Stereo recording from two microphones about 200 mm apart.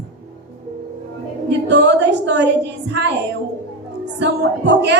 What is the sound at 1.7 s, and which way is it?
Speech, 60° right (ahead or behind).